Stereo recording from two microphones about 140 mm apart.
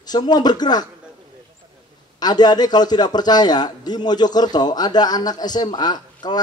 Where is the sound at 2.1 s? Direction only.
30° left (ahead or behind).